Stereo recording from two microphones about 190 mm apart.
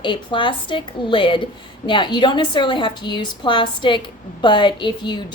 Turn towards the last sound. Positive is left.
turn(degrees=25)  # may be behind; listen again after turning